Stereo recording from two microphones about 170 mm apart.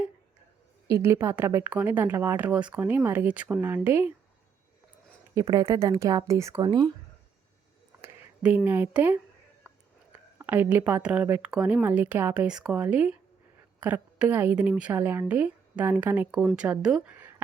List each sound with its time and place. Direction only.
0.9 s speech: 20° right (ahead or behind)
5.3 s speech: 20° right (ahead or behind)
8.0 s speech: 10° right (ahead or behind)
16.4 s speech: 5° left (ahead or behind)